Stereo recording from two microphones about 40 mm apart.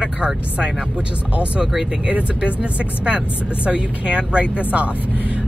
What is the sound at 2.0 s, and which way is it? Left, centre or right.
Speech, right.